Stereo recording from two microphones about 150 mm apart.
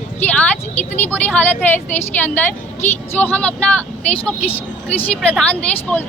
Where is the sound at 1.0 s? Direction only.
10° left (ahead or behind).